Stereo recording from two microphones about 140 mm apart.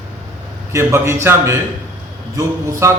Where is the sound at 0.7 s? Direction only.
20° right (ahead or behind).